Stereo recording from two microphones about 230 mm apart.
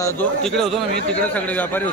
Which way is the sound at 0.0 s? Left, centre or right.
Centre.